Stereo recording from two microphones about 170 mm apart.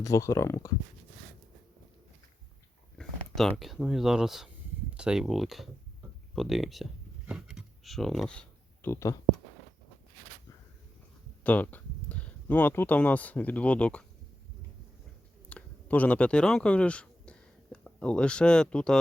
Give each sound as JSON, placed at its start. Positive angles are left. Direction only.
{"t": 0.0, "sound": "speech", "side_deg": 20}
{"t": 3.0, "sound": "speech", "side_deg": 0}
{"t": 7.3, "sound": "a sound", "side_deg": -5}
{"t": 11.4, "sound": "speech", "side_deg": 10}
{"t": 15.4, "sound": "speech", "side_deg": 10}